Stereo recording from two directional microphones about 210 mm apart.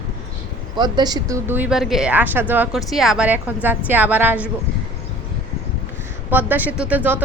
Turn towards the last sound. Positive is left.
turn(degrees=-10)  # may be behind; listen again after turning